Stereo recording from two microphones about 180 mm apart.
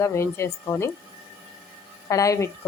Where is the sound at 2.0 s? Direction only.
15° left (ahead or behind).